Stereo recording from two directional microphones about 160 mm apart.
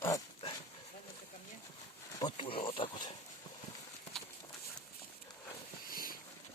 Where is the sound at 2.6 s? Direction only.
30° left (ahead or behind).